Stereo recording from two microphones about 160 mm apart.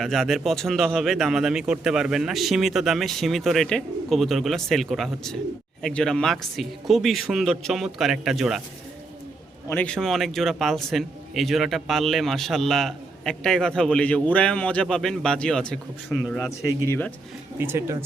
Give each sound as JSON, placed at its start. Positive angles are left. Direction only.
{"t": 0.0, "sound": "a man's voice", "side_deg": 0}
{"t": 9.6, "sound": "a man's voice", "side_deg": 10}
{"t": 16.4, "sound": "speech", "side_deg": 20}
{"t": 17.6, "sound": "speech", "side_deg": -15}